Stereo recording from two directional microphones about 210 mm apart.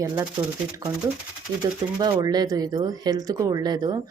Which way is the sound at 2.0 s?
20° right (ahead or behind).